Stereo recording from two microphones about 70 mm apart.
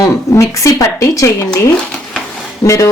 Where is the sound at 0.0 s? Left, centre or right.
Left.